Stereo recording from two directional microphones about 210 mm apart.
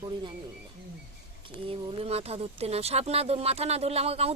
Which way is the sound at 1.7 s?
25° right (ahead or behind).